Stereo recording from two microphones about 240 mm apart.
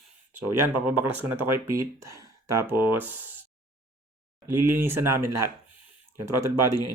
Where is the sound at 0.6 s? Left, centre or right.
Centre.